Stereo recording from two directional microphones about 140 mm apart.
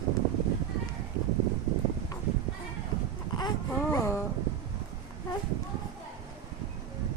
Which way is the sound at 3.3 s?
25° left (ahead or behind).